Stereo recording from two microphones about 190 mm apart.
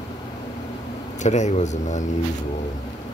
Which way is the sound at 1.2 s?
35° left (ahead or behind).